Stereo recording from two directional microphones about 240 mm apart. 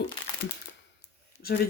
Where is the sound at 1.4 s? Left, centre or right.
Left.